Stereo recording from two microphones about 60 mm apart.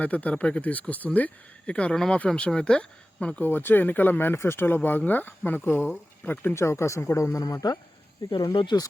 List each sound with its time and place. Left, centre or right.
0.0 s speech: left
1.6 s speech: centre
3.4 s speech: left
6.5 s speech: left
7.3 s speech: left